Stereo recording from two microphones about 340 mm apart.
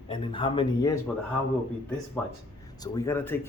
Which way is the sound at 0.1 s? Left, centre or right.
Centre.